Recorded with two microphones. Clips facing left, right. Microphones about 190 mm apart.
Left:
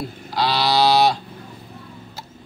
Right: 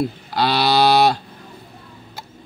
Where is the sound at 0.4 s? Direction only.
60° right (ahead or behind).